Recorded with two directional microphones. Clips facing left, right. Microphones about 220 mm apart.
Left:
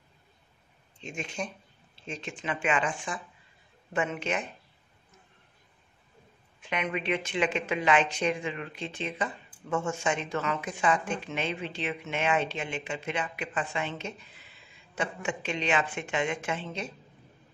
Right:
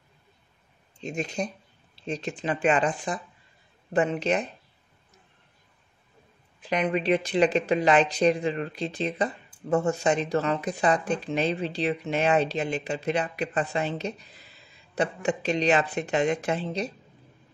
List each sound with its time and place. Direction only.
1.0 s speech: 40° right (ahead or behind)
6.6 s speech: 35° right (ahead or behind)